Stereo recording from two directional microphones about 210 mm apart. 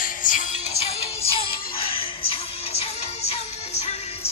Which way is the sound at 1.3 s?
25° left (ahead or behind).